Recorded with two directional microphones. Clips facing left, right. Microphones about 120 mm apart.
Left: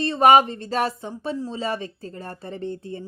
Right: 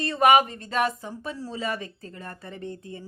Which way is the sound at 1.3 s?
20° left (ahead or behind).